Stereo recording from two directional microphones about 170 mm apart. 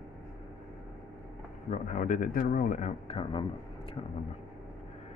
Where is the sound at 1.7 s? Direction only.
45° left (ahead or behind); by 3.5 s 30° left (ahead or behind).